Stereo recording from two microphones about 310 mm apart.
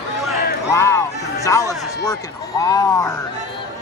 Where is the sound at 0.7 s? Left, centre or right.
Centre.